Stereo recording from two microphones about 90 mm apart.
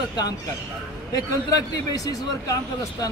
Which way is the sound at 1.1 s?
45° left (ahead or behind).